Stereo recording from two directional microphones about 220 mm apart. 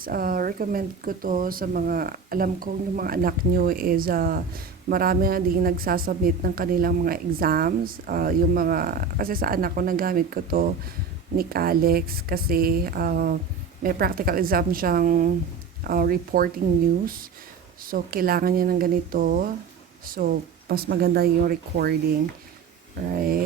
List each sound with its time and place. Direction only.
0.0 s speech: 40° right (ahead or behind)
17.8 s speech: 40° right (ahead or behind)
23.0 s speech: 40° right (ahead or behind)